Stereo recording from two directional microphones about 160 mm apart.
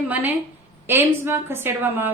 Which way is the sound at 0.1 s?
10° right (ahead or behind).